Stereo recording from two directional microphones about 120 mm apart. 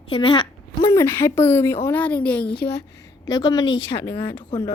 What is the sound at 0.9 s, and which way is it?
Speech, 20° left (ahead or behind).